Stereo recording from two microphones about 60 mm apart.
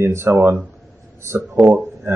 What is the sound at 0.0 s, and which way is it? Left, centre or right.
Speech, right.